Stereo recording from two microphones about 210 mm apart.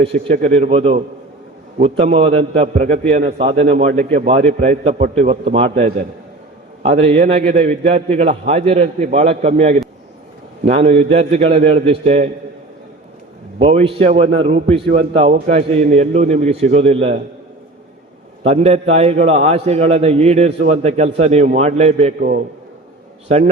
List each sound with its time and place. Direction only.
0.1 s a man's voice: 25° right (ahead or behind)
13.6 s a man's voice: 30° right (ahead or behind)
18.4 s a man's voice: 30° right (ahead or behind)